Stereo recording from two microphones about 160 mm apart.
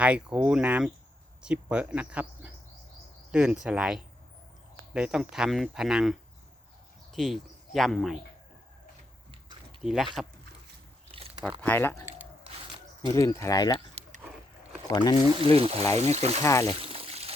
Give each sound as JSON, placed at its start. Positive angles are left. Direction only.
{"t": 0.0, "sound": "speech", "side_deg": -5}
{"t": 9.8, "sound": "speech", "side_deg": 0}
{"t": 11.1, "sound": "a sound", "side_deg": -35}
{"t": 11.6, "sound": "speech", "side_deg": 10}
{"t": 12.5, "sound": "a sound", "side_deg": -35}
{"t": 13.1, "sound": "speech", "side_deg": 20}
{"t": 14.2, "sound": "boat", "side_deg": -10}
{"t": 14.8, "sound": "speech", "side_deg": 25}
{"t": 15.4, "sound": "speech", "side_deg": -35}
{"t": 16.4, "sound": "speech", "side_deg": 20}
{"t": 16.8, "sound": "pour", "side_deg": -35}